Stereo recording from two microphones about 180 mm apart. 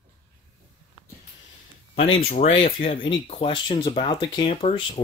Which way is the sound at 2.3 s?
35° left (ahead or behind).